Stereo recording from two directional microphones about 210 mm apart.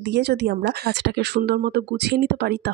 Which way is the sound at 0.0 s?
50° right (ahead or behind).